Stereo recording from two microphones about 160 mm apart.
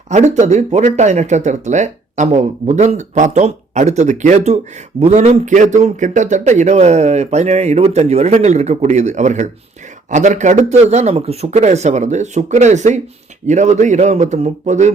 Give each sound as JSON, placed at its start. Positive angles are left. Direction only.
{"t": 0.1, "sound": "speech", "side_deg": -45}